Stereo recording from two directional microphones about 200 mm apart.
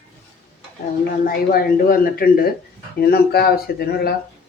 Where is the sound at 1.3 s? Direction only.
50° left (ahead or behind).